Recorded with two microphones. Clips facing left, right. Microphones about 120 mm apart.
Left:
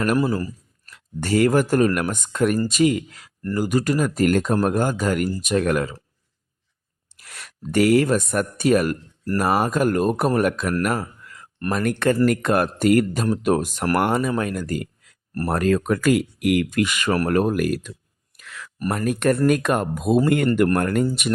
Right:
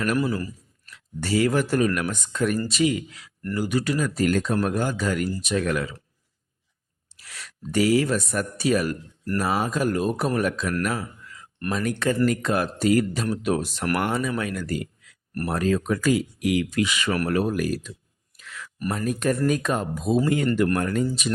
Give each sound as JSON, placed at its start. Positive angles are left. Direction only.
{"t": 0.0, "sound": "speech", "side_deg": 40}
{"t": 7.2, "sound": "speech", "side_deg": 50}
{"t": 10.8, "sound": "a sound", "side_deg": 50}
{"t": 11.7, "sound": "speech", "side_deg": 60}
{"t": 13.3, "sound": "speech", "side_deg": 45}
{"t": 15.4, "sound": "speech", "side_deg": 55}
{"t": 18.3, "sound": "a sound", "side_deg": 60}
{"t": 18.9, "sound": "speech", "side_deg": 60}